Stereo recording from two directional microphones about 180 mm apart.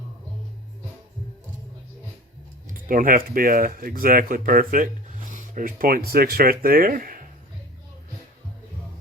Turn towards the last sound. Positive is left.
turn(degrees=-50)  # may be behind; listen again after turning